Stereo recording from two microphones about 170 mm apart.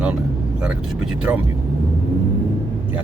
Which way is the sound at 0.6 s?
10° right (ahead or behind).